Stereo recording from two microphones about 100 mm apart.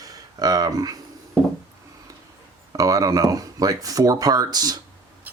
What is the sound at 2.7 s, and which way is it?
Speech, 35° right (ahead or behind).